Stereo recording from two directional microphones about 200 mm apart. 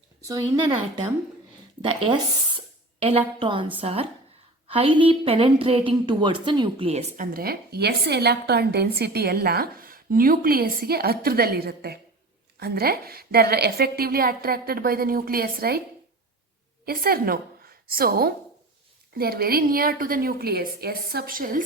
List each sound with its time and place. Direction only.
0.3 s a woman's voice: 20° right (ahead or behind)
1.8 s a woman's voice: 25° right (ahead or behind)
7.3 s speech: 50° right (ahead or behind)
16.8 s a woman's voice: 50° right (ahead or behind)